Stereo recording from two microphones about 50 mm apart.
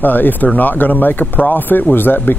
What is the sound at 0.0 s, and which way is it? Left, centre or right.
Speech, left.